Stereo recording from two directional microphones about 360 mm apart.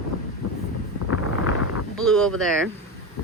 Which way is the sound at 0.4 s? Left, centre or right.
Left.